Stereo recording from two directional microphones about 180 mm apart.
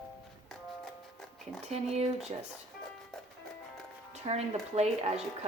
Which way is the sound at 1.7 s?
35° right (ahead or behind).